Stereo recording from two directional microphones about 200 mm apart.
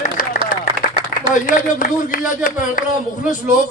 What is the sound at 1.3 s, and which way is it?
Speech, 40° left (ahead or behind).